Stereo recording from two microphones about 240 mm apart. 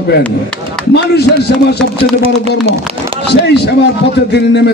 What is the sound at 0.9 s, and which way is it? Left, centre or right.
Speech, left.